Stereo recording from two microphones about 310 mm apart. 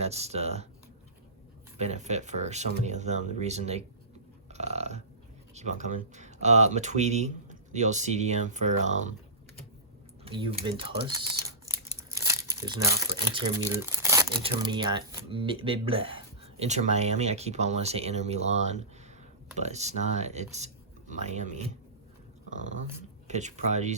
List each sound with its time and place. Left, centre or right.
0.0 s speech: centre
1.8 s speech: right
4.4 s a sound: right
5.5 s speech: right
10.2 s speech: centre
23.3 s speech: right